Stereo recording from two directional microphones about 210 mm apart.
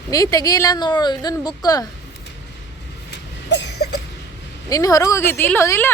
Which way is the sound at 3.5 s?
55° left (ahead or behind).